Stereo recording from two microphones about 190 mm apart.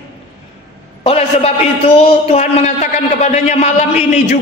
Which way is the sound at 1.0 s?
30° left (ahead or behind).